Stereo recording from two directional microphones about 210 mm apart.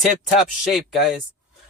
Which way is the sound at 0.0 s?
Centre (ahead or behind).